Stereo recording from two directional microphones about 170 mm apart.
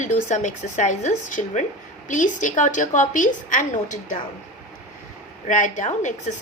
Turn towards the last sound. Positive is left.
turn(degrees=45)  # may be behind; listen again after turning